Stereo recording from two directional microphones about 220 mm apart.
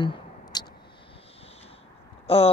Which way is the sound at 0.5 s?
20° left (ahead or behind).